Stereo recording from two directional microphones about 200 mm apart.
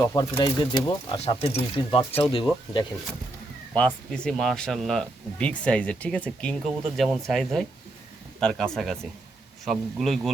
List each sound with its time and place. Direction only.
0.0 s speech: 15° left (ahead or behind)
3.8 s speech: 5° left (ahead or behind)